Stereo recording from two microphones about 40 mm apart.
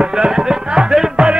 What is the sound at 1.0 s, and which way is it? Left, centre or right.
Music, centre.